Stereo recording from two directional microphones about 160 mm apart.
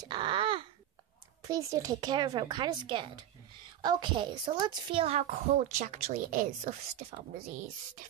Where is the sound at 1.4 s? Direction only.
20° right (ahead or behind).